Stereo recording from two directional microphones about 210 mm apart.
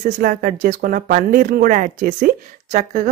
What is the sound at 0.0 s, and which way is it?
Speech, 45° right (ahead or behind).